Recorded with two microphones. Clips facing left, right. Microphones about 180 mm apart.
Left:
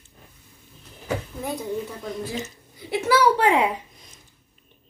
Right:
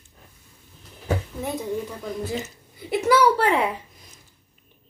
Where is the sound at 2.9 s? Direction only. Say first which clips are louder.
Right 1 dB; 10° left (ahead or behind).